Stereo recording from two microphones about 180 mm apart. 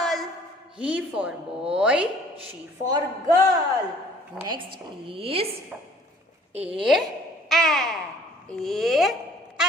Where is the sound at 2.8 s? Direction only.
20° right (ahead or behind).